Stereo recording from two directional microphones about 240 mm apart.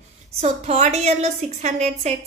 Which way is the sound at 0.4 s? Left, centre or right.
Right.